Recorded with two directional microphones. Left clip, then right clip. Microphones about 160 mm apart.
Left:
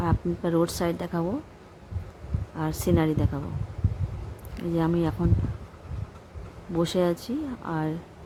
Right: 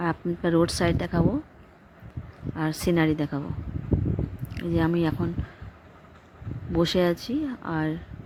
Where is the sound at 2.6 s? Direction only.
20° right (ahead or behind).